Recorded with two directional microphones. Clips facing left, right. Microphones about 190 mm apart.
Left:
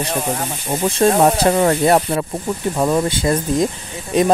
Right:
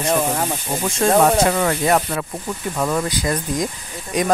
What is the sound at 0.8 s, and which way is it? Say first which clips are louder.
Speech: left 2 dB; 35° left (ahead or behind).